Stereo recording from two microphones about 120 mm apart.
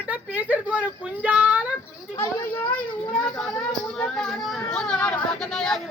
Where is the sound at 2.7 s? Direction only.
10° left (ahead or behind).